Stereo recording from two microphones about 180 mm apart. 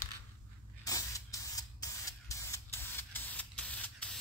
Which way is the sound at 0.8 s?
20° left (ahead or behind).